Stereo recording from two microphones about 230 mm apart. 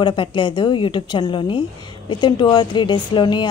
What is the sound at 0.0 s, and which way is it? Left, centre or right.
A woman's voice, left.